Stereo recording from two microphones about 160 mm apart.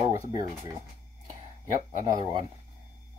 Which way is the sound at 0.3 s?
25° right (ahead or behind).